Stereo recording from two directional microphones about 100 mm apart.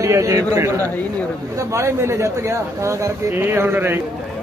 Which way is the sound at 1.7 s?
30° right (ahead or behind).